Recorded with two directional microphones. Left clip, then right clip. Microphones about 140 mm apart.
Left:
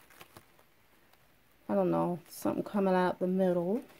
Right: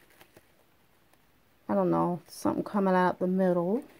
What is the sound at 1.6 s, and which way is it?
Speech, 20° right (ahead or behind).